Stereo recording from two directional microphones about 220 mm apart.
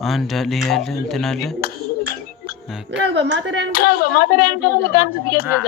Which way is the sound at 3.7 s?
40° left (ahead or behind).